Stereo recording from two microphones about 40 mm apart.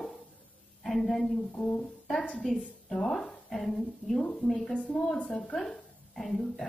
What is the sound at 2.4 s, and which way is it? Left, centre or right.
A woman's voice, centre.